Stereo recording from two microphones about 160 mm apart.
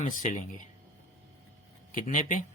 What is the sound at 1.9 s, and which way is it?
Speech, 50° left (ahead or behind).